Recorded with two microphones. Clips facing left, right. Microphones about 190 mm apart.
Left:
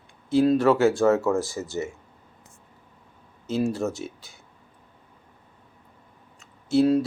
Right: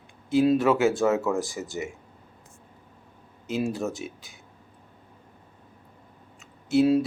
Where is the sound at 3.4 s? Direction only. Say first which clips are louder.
Left 3 dB; 15° right (ahead or behind).